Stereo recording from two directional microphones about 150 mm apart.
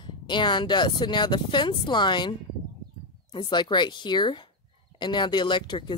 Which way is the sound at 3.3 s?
30° left (ahead or behind).